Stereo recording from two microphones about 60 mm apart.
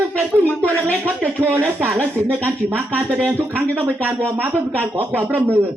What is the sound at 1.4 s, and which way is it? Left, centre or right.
Speech, right.